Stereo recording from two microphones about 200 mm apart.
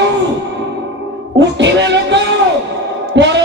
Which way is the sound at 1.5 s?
60° right (ahead or behind).